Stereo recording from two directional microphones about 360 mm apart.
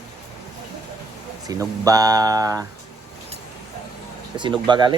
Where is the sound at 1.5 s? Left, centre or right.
Centre.